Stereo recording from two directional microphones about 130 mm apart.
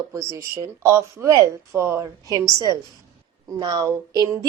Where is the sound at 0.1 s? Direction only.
20° right (ahead or behind).